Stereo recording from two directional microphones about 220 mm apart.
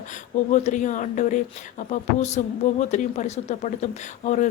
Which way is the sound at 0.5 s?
35° left (ahead or behind).